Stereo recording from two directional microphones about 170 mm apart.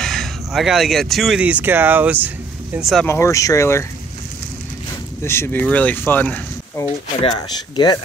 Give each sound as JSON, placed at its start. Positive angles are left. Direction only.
{"t": 0.0, "sound": "speech", "side_deg": 0}
{"t": 3.1, "sound": "speech", "side_deg": 15}
{"t": 5.2, "sound": "speech", "side_deg": 15}
{"t": 7.2, "sound": "speech", "side_deg": 25}